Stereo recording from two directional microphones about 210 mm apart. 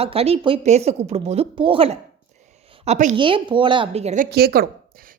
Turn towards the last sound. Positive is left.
turn(degrees=-45)  # may be behind; listen again after turning